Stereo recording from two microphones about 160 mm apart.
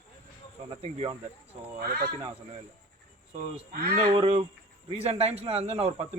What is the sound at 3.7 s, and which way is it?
Speech, 80° right.